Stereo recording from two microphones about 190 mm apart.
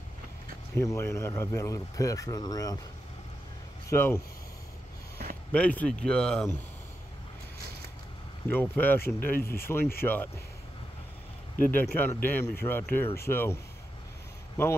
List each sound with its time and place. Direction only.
0.7 s speech: 15° left (ahead or behind)
3.9 s speech: 15° left (ahead or behind)
5.5 s speech: 5° left (ahead or behind)
8.5 s speech: 10° left (ahead or behind)
11.7 s speech: 10° left (ahead or behind)